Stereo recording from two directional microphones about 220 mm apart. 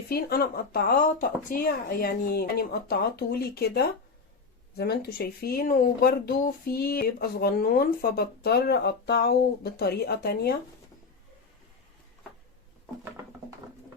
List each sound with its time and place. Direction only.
0.1 s speech: 45° left (ahead or behind)